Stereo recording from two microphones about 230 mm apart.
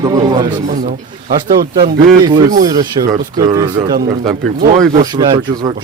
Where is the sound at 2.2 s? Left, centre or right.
Centre.